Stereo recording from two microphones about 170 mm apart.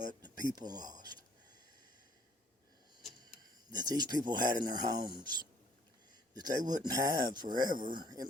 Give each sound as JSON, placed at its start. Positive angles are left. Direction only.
{"t": 0.2, "sound": "speech", "side_deg": -25}
{"t": 3.7, "sound": "speech", "side_deg": -25}
{"t": 6.3, "sound": "speech", "side_deg": -25}